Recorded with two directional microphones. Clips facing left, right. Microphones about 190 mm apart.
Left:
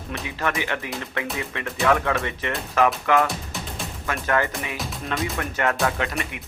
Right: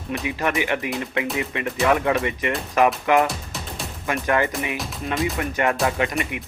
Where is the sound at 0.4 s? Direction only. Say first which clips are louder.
Right 3 dB; 15° right (ahead or behind).